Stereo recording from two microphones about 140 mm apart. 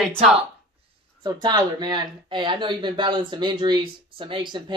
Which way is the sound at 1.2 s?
30° right (ahead or behind).